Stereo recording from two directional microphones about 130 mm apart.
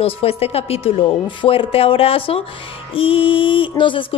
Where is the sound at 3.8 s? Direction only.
40° left (ahead or behind).